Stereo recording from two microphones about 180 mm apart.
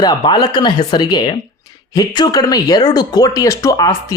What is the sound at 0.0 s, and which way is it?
Speech, 20° left (ahead or behind).